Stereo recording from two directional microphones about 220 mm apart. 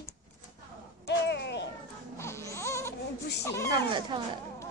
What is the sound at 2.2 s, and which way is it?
Baby cry, 10° left (ahead or behind).